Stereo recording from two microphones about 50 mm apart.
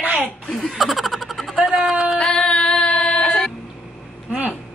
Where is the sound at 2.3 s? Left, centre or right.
Centre.